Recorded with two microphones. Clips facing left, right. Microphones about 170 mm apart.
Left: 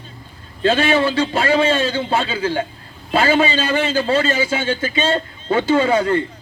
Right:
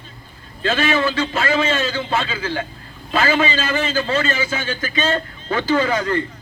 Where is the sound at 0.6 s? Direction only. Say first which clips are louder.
Left 3 dB; 30° left (ahead or behind).